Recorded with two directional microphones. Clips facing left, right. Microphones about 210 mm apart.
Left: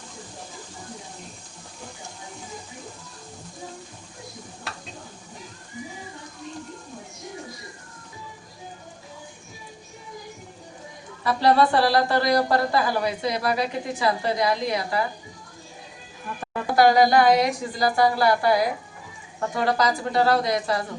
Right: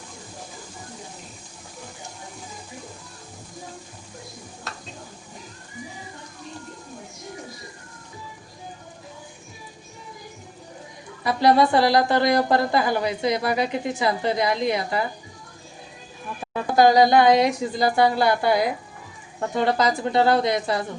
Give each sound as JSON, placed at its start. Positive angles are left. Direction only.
{"t": 11.2, "sound": "speech", "side_deg": -15}
{"t": 16.9, "sound": "speech", "side_deg": -25}